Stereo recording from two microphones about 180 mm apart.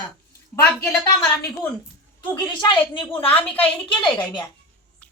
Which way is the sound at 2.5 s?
25° left (ahead or behind).